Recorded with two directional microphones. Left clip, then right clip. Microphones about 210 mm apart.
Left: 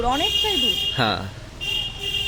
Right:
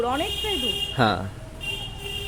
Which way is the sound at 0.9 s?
10° right (ahead or behind).